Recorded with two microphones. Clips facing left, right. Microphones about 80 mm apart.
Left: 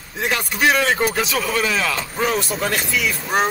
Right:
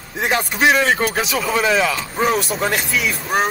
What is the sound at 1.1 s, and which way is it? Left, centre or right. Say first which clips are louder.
Speech: right 1 dB; centre.